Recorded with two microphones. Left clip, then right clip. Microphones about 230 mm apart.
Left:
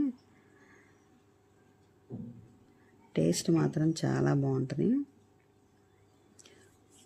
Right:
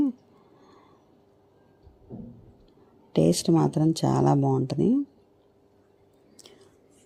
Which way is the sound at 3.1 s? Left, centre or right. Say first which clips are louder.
Right 7 dB; centre.